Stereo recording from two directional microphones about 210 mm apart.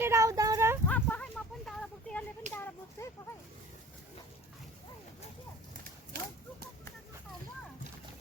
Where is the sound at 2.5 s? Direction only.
35° right (ahead or behind).